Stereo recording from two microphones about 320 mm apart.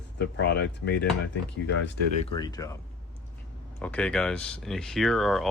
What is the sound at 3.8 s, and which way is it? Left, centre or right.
Speech, centre.